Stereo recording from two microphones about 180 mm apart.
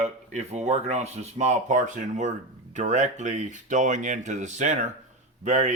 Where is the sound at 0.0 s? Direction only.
40° right (ahead or behind).